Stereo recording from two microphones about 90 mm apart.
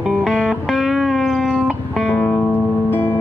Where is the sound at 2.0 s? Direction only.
20° left (ahead or behind).